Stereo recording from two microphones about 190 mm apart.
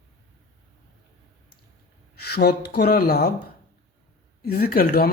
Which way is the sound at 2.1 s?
55° left (ahead or behind).